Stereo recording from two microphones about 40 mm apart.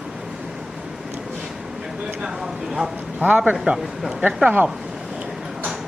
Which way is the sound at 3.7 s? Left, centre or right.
Right.